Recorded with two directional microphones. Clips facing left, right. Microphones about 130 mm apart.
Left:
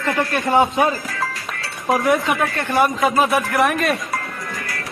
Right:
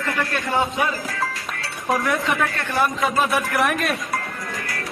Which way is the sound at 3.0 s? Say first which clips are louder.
Left 4 dB; centre (ahead or behind).